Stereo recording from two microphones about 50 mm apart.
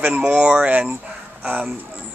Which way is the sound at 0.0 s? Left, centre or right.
Right.